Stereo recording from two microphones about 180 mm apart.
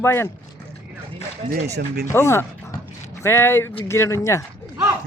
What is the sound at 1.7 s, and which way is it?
Speech, 60° right (ahead or behind).